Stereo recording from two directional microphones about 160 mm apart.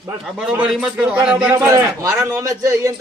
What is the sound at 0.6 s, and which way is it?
Speech, 5° right (ahead or behind).